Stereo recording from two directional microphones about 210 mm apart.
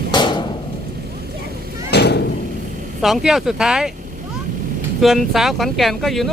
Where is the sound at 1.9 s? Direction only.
50° left (ahead or behind).